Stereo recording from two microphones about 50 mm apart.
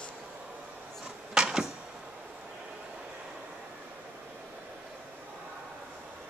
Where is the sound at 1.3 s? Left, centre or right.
Centre.